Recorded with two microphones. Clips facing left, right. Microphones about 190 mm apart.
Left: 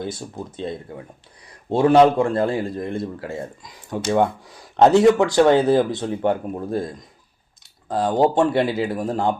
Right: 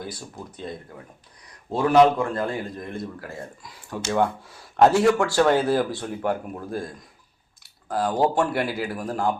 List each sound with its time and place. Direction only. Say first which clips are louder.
0.0 s speech: left 6 dB; 25° left (ahead or behind)